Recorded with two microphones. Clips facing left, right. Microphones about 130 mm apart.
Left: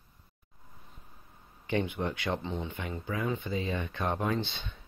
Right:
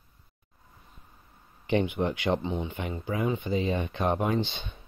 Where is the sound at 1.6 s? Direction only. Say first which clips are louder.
Right 5 dB; 20° right (ahead or behind).